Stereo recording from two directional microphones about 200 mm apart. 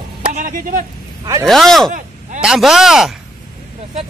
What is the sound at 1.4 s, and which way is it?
Speech, centre (ahead or behind).